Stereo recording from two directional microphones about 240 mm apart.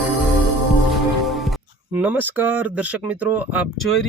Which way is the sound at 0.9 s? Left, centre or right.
Centre.